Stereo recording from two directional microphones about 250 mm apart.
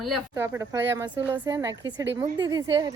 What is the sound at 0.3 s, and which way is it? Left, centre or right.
A woman's voice, centre.